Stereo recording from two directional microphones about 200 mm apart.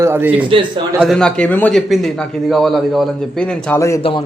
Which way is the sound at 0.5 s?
25° right (ahead or behind).